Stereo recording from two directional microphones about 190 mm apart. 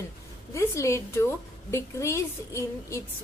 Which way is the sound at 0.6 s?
15° left (ahead or behind).